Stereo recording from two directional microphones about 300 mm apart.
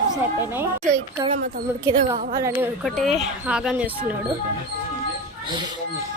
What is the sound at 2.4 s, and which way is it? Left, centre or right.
Speech, centre.